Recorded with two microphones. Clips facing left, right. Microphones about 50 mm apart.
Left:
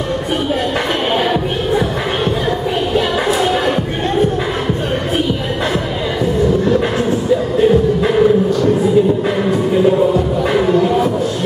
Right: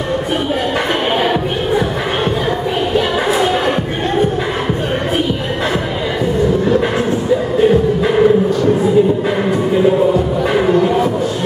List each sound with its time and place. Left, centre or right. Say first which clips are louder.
1.1 s music: even; centre
2.9 s music: right 1 dB; centre
7.6 s music: even; centre
9.8 s music: even; centre